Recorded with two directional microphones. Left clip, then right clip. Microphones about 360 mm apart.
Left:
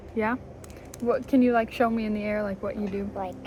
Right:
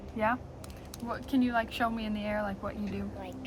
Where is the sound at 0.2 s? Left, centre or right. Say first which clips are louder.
Left 2 dB; centre.